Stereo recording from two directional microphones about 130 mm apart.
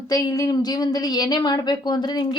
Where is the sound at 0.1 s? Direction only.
30° left (ahead or behind).